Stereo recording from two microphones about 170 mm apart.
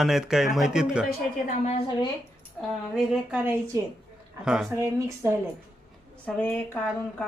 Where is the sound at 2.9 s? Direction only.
5° right (ahead or behind).